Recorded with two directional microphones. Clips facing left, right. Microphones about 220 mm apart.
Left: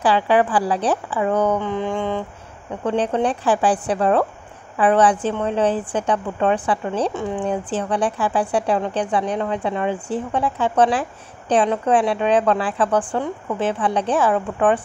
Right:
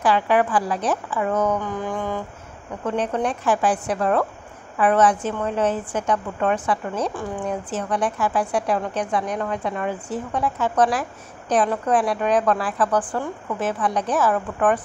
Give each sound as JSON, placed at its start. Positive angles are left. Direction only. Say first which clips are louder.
{"t": 0.0, "sound": "a woman's voice", "louder": "left 2 dB", "side_deg": 30}